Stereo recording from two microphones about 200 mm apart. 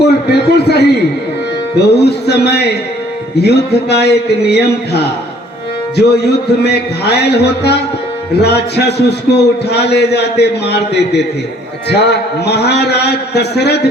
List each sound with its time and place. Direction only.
0.0 s a man's voice: 55° left (ahead or behind)